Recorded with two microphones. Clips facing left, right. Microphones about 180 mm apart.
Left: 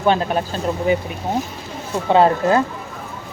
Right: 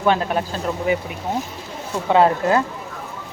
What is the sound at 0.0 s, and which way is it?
Speech, 30° left (ahead or behind).